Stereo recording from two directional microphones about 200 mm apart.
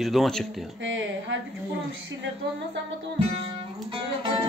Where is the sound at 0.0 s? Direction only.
Centre (ahead or behind).